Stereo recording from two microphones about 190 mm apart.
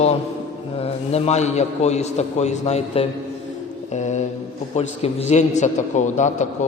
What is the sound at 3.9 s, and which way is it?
Mantra, 40° left (ahead or behind).